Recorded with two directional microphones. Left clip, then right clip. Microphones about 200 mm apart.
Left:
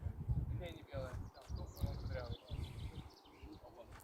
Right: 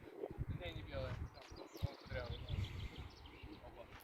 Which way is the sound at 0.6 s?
45° left (ahead or behind).